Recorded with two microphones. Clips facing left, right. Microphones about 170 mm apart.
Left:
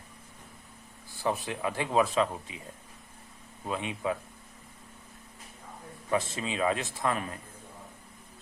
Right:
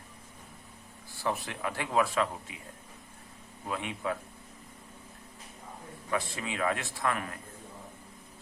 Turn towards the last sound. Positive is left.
turn(degrees=20)  # may be behind; listen again after turning